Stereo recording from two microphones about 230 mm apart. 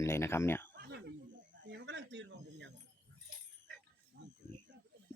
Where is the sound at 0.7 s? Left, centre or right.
Right.